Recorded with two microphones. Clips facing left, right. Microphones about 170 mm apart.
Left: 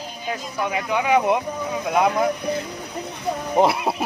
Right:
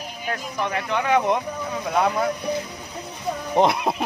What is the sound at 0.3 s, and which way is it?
Speech, 10° left (ahead or behind).